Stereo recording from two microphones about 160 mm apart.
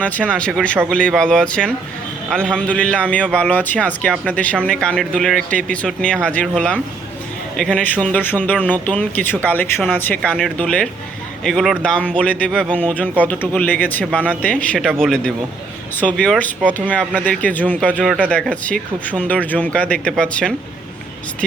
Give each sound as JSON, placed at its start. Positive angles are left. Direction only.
{"t": 0.0, "sound": "speech", "side_deg": 10}